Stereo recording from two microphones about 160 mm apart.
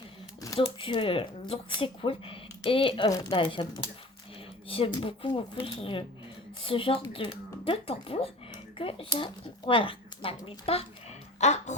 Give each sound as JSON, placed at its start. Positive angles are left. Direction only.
{"t": 0.8, "sound": "speech", "side_deg": 35}
{"t": 4.7, "sound": "speech", "side_deg": 30}